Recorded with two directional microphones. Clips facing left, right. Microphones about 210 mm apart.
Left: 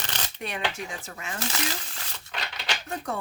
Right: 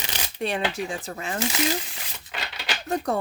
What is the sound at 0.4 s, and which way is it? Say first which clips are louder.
Speech: right 6 dB; 30° right (ahead or behind).